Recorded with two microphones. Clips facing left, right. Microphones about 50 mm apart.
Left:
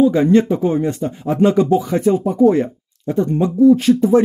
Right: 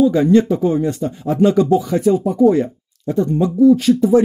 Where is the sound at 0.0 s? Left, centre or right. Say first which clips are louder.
Even; left.